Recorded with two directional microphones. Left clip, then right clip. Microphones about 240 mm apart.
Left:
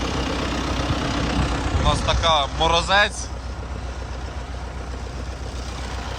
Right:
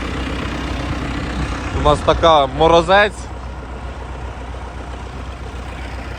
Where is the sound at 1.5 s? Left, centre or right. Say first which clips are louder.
Right 2 dB; left.